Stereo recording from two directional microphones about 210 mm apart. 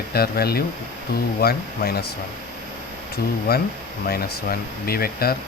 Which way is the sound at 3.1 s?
45° left (ahead or behind).